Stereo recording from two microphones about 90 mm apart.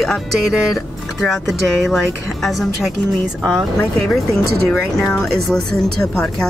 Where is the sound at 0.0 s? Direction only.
Centre (ahead or behind).